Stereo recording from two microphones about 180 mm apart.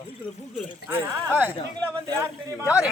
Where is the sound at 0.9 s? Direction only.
10° right (ahead or behind).